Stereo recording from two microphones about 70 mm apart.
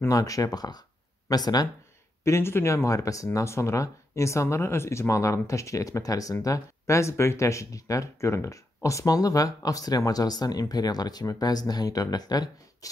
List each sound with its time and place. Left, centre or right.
0.1 s speech: left
2.2 s speech: left